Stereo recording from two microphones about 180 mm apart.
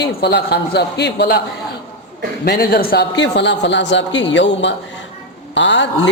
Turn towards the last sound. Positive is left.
turn(degrees=85)